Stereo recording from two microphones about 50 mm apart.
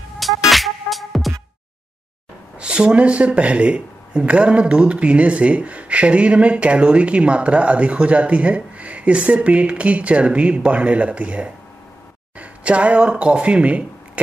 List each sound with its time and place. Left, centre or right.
0.5 s music: centre
2.6 s speech: centre